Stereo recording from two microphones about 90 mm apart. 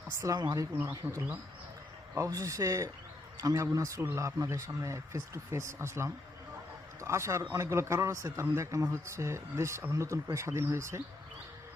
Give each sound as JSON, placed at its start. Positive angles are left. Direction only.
{"t": 0.2, "sound": "speech", "side_deg": -40}
{"t": 0.7, "sound": "speech", "side_deg": -20}
{"t": 2.1, "sound": "speech", "side_deg": -35}
{"t": 4.0, "sound": "a man's voice", "side_deg": -25}